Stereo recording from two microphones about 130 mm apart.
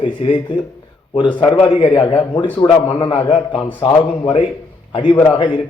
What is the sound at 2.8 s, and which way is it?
A man's voice, 35° left (ahead or behind).